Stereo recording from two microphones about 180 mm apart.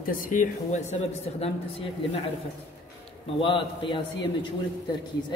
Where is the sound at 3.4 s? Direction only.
30° left (ahead or behind).